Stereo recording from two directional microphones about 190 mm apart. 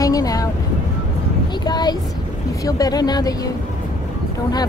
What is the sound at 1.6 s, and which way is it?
Speech, 20° left (ahead or behind).